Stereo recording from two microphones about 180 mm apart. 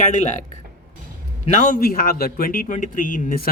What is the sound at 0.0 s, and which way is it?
Speech, 40° left (ahead or behind).